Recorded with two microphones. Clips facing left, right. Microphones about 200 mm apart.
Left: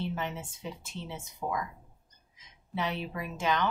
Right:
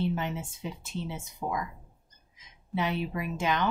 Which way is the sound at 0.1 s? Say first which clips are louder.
Right 3 dB; 15° right (ahead or behind).